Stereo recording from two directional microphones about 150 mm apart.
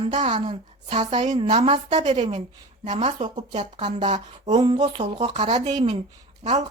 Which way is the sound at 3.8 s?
30° right (ahead or behind).